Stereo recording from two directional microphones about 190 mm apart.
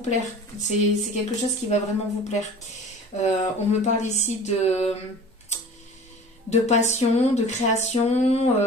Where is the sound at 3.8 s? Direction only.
35° left (ahead or behind).